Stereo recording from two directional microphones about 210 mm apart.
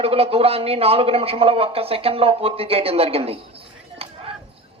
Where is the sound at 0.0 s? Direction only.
25° right (ahead or behind).